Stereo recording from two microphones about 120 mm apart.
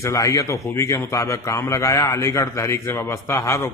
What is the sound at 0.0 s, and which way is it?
A man's voice, 25° left (ahead or behind).